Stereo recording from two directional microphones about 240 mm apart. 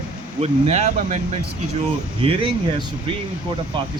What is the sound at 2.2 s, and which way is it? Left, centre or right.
Speech, right.